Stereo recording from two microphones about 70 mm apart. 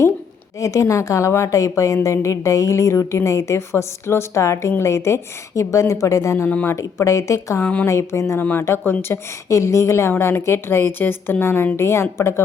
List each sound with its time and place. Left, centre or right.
0.6 s a woman's voice: left
7.6 s speech: centre
7.9 s a woman's voice: left
8.4 s a woman's voice: left
9.5 s a woman's voice: left